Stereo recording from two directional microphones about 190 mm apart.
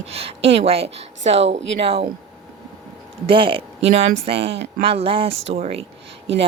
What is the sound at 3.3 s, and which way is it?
Speech, 25° right (ahead or behind).